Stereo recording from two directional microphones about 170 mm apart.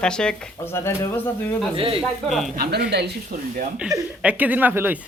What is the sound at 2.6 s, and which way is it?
Speech, 65° right (ahead or behind).